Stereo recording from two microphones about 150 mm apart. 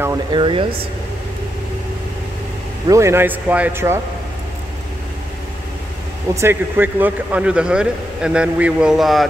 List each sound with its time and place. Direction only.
0.3 s speech: 35° right (ahead or behind)
2.9 s a man's voice: 20° right (ahead or behind)
6.3 s a man's voice: 15° right (ahead or behind)